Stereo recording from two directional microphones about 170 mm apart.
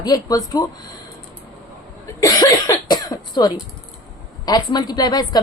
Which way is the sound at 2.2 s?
20° left (ahead or behind).